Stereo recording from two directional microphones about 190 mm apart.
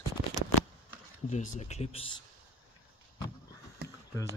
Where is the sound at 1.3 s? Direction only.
35° left (ahead or behind).